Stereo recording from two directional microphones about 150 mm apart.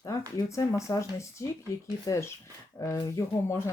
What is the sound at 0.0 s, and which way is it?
Speech, 20° left (ahead or behind).